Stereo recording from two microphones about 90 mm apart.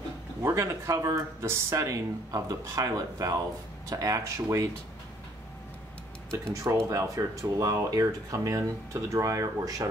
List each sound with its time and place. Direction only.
0.4 s speech: 35° right (ahead or behind)
6.4 s speech: 35° right (ahead or behind)